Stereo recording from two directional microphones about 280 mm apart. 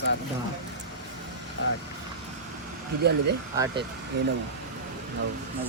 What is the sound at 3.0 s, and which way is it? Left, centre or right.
Speech, right.